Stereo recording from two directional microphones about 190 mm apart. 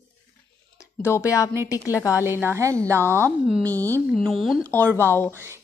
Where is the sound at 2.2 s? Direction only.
10° right (ahead or behind).